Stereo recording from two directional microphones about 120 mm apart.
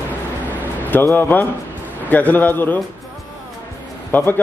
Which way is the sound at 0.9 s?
15° left (ahead or behind).